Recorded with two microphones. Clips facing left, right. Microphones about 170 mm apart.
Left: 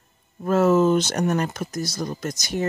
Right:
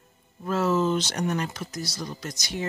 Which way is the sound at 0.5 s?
50° left (ahead or behind).